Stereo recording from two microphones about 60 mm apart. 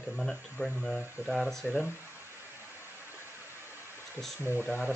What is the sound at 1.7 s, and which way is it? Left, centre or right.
Speech, left.